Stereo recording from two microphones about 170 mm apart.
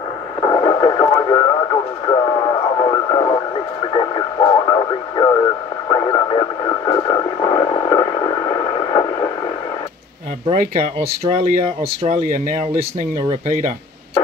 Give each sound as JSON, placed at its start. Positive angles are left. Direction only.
{"t": 0.4, "sound": "radio", "side_deg": 30}
{"t": 10.5, "sound": "speech", "side_deg": -40}